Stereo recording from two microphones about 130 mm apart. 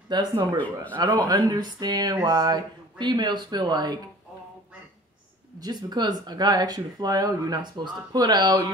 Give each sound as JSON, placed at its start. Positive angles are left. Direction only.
{"t": 0.1, "sound": "speech", "side_deg": -35}
{"t": 5.6, "sound": "speech", "side_deg": -35}